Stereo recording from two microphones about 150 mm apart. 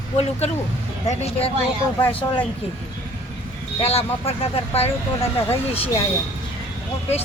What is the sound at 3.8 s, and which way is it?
Speech, 40° left (ahead or behind).